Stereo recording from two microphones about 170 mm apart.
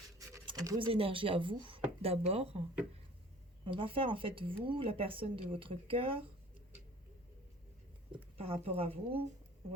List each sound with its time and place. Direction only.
0.2 s scratch: 20° right (ahead or behind)
0.9 s speech: 30° right (ahead or behind)
8.4 s speech: 35° right (ahead or behind)